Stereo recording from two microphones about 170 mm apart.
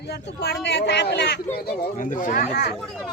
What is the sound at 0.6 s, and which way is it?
Speech, 90° left.